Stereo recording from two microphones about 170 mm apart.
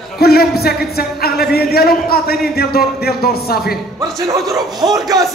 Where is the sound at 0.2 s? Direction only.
65° left (ahead or behind).